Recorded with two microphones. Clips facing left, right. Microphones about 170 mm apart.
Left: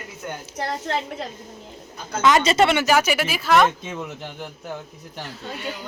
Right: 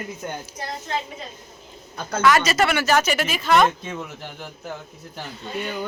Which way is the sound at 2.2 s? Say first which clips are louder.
Left 1 dB; 20° left (ahead or behind).